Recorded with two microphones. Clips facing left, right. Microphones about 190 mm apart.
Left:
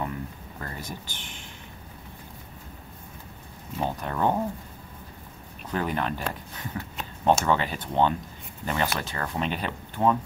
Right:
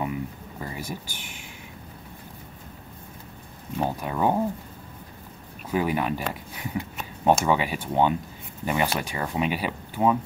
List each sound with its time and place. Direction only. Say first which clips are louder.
0.0 s a sound: right 3 dB; 10° right (ahead or behind)
3.8 s speech: right 1 dB; 10° right (ahead or behind)
5.7 s speech: right 3 dB; 10° right (ahead or behind)